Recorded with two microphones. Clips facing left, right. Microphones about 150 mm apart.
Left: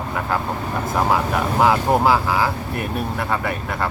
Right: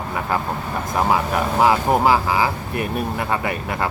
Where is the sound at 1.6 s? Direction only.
5° right (ahead or behind).